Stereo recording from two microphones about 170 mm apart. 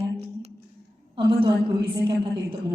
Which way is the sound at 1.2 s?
30° right (ahead or behind).